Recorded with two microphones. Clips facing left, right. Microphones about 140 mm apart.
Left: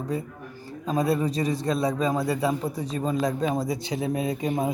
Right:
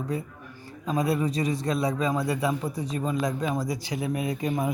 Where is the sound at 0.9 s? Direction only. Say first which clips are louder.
Left 1 dB; 25° left (ahead or behind).